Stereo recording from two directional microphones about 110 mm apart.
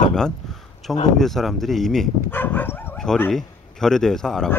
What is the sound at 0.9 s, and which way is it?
Speech, 5° left (ahead or behind).